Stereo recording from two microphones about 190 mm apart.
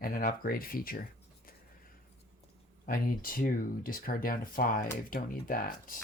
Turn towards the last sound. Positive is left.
turn(degrees=45)  # may be behind; listen again after turning